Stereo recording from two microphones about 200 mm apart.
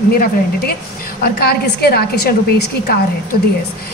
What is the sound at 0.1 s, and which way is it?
A woman's voice, 50° left (ahead or behind).